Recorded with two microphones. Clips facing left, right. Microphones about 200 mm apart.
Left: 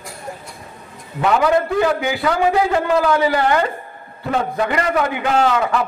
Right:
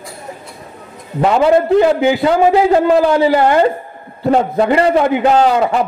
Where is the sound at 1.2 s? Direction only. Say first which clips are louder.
Right 5 dB; 30° right (ahead or behind).